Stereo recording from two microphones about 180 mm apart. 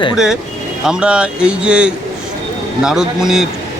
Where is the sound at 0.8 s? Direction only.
5° right (ahead or behind).